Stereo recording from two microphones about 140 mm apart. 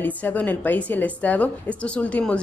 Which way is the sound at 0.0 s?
10° left (ahead or behind).